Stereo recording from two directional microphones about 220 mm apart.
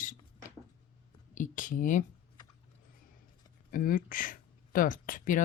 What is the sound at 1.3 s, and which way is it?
Speech, 35° left (ahead or behind).